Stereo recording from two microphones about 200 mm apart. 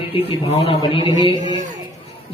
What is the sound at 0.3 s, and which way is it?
Speech, 30° left (ahead or behind).